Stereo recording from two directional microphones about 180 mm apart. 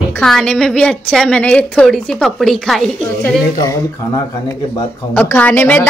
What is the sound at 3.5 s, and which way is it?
Speech, 20° left (ahead or behind).